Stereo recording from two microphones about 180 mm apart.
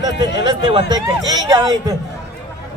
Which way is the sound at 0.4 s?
25° right (ahead or behind).